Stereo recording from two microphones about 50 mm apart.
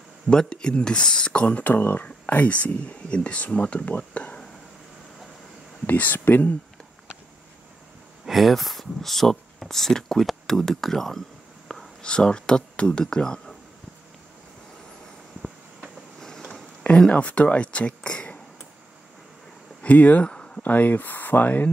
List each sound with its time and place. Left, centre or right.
0.3 s speech: centre
1.6 s speech: left
2.2 s speech: left
5.9 s speech: left
8.3 s speech: centre
12.0 s speech: centre
16.2 s vehicle: centre
17.1 s speech: left
19.8 s a sound: left
20.6 s speech: left